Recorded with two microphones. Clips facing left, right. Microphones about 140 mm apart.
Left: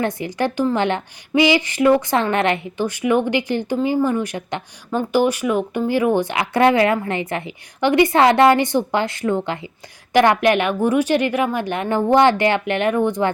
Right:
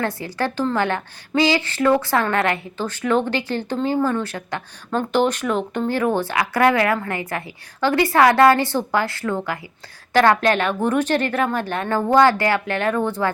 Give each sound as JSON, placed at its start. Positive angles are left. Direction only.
{"t": 0.0, "sound": "a woman's voice", "side_deg": 20}